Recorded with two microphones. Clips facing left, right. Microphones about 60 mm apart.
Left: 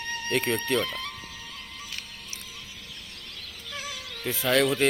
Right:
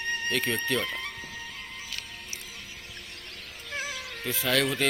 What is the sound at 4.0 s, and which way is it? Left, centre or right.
Cat, right.